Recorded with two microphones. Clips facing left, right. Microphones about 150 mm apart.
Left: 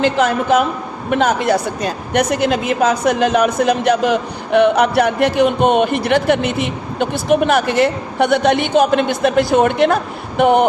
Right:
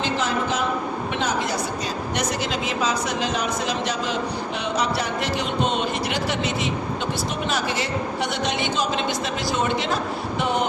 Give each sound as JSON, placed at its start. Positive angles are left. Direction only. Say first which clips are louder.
{"t": 0.0, "sound": "speech", "louder": "left 8 dB", "side_deg": 55}